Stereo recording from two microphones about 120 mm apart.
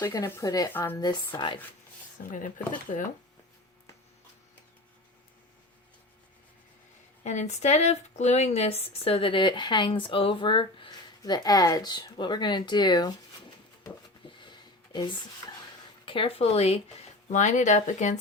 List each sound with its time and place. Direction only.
0.0 s speech: 30° left (ahead or behind)
0.7 s speech: 15° left (ahead or behind)
1.3 s speech: 40° left (ahead or behind)
7.3 s speech: 70° left (ahead or behind); by 13.1 s 35° left (ahead or behind)
14.3 s a sound: 40° left (ahead or behind)
14.9 s speech: 40° left (ahead or behind); by 16.8 s 60° left (ahead or behind)
17.2 s speech: 80° left